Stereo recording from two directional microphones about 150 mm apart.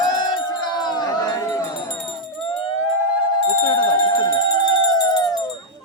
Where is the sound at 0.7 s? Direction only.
30° left (ahead or behind).